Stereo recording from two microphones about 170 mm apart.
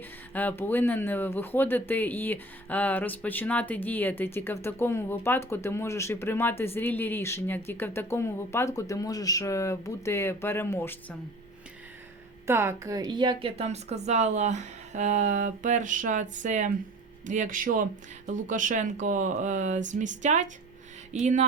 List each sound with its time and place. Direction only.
0.3 s speech: 10° left (ahead or behind)
12.5 s a woman's voice: 15° right (ahead or behind); by 21.3 s 45° right (ahead or behind)